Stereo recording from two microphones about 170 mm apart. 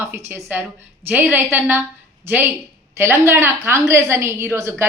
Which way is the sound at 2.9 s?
15° right (ahead or behind).